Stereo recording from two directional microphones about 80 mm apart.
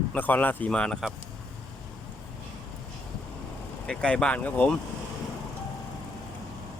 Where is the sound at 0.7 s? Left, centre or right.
Centre.